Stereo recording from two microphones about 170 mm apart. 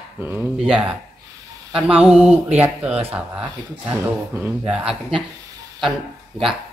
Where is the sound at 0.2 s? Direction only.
10° right (ahead or behind).